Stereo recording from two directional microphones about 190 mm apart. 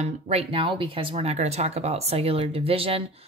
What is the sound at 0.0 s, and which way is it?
Speech, 35° right (ahead or behind).